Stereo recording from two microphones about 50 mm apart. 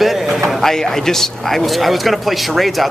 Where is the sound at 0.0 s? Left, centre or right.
Centre.